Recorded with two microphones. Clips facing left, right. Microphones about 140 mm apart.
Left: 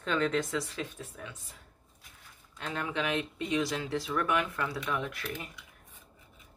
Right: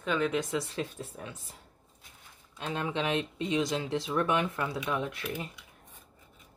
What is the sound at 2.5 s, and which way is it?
Speech, 20° right (ahead or behind).